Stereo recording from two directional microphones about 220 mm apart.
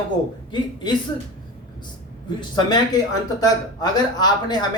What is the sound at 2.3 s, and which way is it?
Speech, 20° left (ahead or behind).